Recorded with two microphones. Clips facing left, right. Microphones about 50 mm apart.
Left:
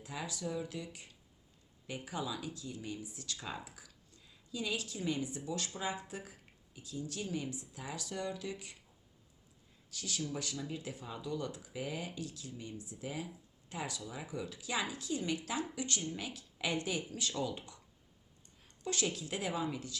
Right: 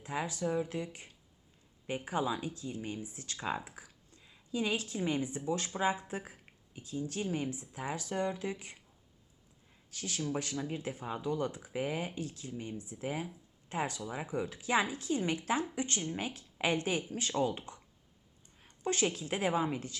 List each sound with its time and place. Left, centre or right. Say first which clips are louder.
0.0 s speech: right 6 dB; right
9.9 s speech: right 4 dB; right
18.6 s speech: right 5 dB; right